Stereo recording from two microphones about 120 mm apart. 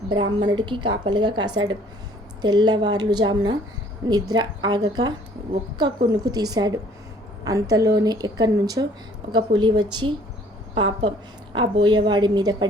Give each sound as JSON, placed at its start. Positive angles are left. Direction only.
{"t": 0.1, "sound": "a woman's voice", "side_deg": -40}
{"t": 11.5, "sound": "a woman's voice", "side_deg": -40}